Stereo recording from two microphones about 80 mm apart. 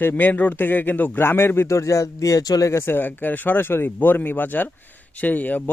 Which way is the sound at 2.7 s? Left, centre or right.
Left.